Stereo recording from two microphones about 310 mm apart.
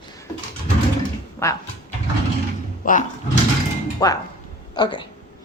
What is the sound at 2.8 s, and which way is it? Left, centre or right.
Speech, left.